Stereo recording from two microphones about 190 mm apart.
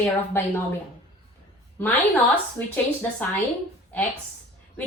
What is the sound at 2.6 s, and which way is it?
Speech, 10° left (ahead or behind).